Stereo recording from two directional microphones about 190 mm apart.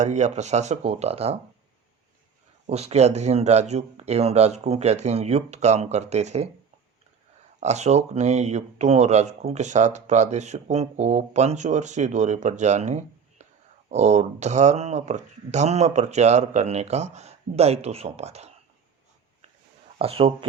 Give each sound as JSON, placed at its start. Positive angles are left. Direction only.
{"t": 0.0, "sound": "speech", "side_deg": -40}
{"t": 2.6, "sound": "speech", "side_deg": -35}
{"t": 7.6, "sound": "speech", "side_deg": -35}
{"t": 20.0, "sound": "speech", "side_deg": -30}